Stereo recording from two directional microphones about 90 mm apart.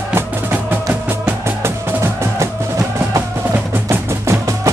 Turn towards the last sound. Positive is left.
turn(degrees=-35)  # may be behind; listen again after turning